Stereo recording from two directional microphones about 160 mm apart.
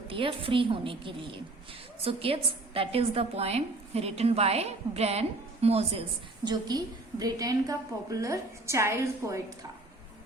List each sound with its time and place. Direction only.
0.1 s a woman's voice: 35° right (ahead or behind)
6.4 s a woman's voice: 25° right (ahead or behind)